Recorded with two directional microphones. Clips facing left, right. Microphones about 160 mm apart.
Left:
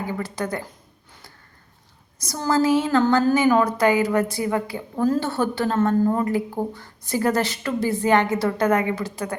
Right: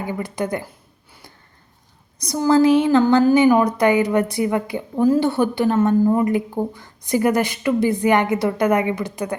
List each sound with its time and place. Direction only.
0.1 s speech: 15° right (ahead or behind)
2.3 s a woman's voice: 20° right (ahead or behind)